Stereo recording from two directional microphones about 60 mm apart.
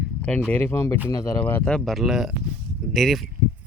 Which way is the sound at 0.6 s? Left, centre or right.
Left.